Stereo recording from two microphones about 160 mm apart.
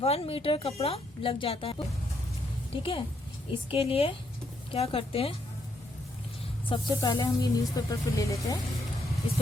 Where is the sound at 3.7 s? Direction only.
35° left (ahead or behind).